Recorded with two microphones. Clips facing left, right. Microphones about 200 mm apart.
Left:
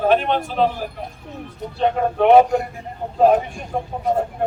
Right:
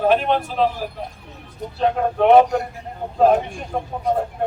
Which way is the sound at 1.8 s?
Centre (ahead or behind).